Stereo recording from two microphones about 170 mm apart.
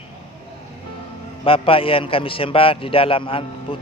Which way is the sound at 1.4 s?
35° left (ahead or behind).